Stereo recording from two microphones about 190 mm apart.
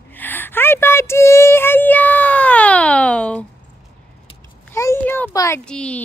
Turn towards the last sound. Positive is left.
turn(degrees=5)  # may be behind; listen again after turning